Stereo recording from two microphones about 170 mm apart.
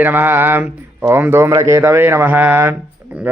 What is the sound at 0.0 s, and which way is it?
A man's voice, 10° right (ahead or behind).